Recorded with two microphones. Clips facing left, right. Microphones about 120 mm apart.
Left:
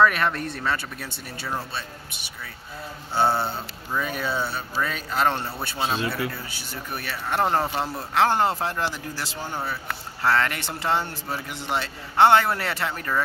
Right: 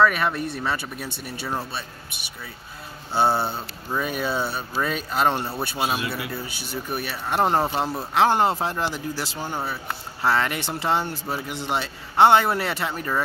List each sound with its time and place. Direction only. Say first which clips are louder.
0.0 s speech: even; 5° right (ahead or behind)
3.2 s speech: right 1 dB; 10° right (ahead or behind)